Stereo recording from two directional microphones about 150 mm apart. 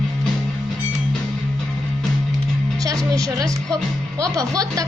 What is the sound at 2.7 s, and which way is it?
Music, 25° right (ahead or behind).